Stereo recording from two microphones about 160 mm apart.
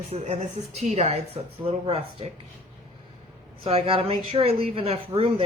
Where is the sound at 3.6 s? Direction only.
35° right (ahead or behind).